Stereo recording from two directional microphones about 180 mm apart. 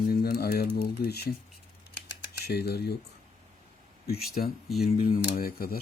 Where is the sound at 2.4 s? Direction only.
65° left (ahead or behind).